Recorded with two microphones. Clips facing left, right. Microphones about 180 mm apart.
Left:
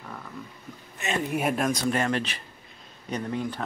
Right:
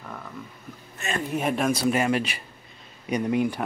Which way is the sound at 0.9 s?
20° left (ahead or behind).